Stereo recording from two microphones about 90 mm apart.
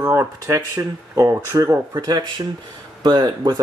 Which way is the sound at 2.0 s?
55° right (ahead or behind).